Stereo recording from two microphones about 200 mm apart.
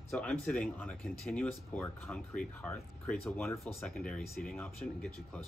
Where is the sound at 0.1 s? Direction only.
5° left (ahead or behind).